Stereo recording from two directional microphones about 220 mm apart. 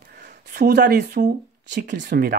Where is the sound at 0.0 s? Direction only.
45° right (ahead or behind).